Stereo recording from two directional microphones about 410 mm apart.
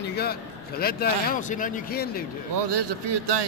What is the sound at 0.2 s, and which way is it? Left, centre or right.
A man's voice, left.